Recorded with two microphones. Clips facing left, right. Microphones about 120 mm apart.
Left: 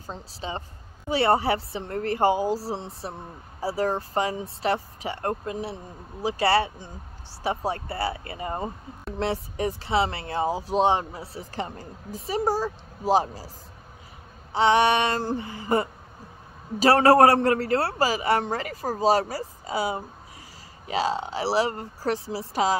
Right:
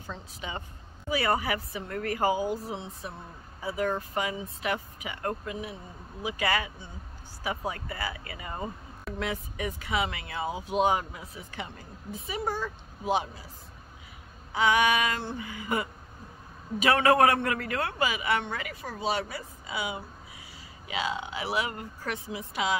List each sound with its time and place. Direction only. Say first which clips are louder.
0.0 s speech: left 4 dB; 35° left (ahead or behind)
14.5 s a woman's voice: left 4 dB; 30° left (ahead or behind)